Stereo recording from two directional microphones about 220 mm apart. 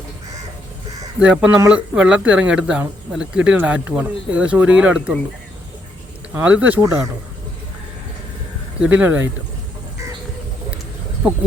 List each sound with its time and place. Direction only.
1.2 s speech: 5° right (ahead or behind)
6.3 s speech: 5° right (ahead or behind)
8.8 s speech: 5° right (ahead or behind)